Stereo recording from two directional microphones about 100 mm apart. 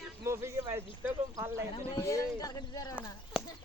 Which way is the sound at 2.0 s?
35° left (ahead or behind).